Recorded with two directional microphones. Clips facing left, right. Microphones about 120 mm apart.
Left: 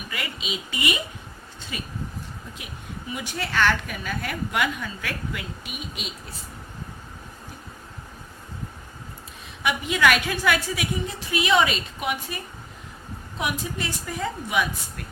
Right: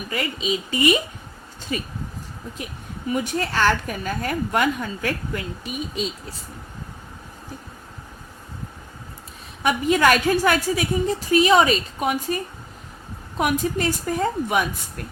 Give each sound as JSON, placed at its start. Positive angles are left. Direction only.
{"t": 0.1, "sound": "a woman's voice", "side_deg": -40}
{"t": 3.1, "sound": "a woman's voice", "side_deg": -40}
{"t": 9.6, "sound": "a woman's voice", "side_deg": -40}